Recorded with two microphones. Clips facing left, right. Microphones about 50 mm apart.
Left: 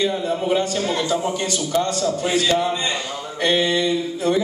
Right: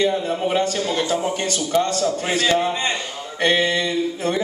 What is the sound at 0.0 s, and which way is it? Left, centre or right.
Speech, right.